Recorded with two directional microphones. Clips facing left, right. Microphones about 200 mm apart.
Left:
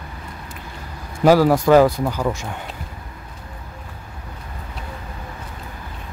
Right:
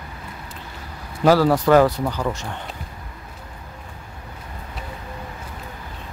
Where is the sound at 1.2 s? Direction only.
10° left (ahead or behind).